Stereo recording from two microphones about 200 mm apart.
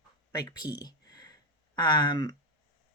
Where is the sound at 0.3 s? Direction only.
20° left (ahead or behind).